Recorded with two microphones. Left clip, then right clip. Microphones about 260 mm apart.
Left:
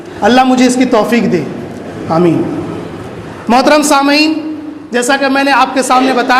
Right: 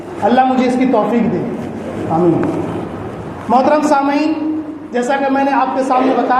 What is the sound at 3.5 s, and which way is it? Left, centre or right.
A man's voice, left.